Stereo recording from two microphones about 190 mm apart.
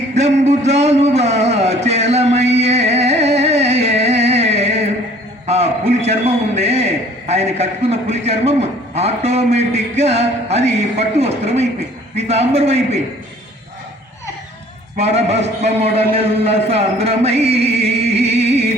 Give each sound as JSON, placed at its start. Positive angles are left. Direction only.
{"t": 0.1, "sound": "a sound", "side_deg": -35}
{"t": 5.5, "sound": "a man's voice", "side_deg": -35}
{"t": 14.9, "sound": "a man's voice", "side_deg": -35}
{"t": 18.1, "sound": "music", "side_deg": -35}